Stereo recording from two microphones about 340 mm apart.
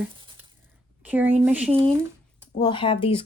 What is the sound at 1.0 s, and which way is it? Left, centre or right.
Speech, centre.